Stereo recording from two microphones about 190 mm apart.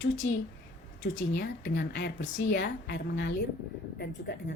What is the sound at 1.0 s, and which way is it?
A woman's voice, 75° left (ahead or behind).